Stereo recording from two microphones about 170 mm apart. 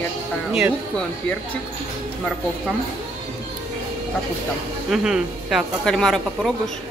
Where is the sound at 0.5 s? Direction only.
5° right (ahead or behind).